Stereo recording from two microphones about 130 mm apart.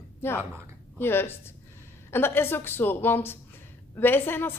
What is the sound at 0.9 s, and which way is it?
A woman's voice, 15° left (ahead or behind).